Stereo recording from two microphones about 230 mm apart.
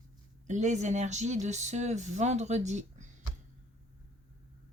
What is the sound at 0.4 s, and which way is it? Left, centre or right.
Speech, right.